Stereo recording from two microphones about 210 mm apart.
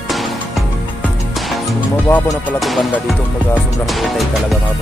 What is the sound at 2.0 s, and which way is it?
Music, 10° left (ahead or behind).